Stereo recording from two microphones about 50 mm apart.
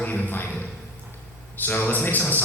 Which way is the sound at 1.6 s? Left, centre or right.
Left.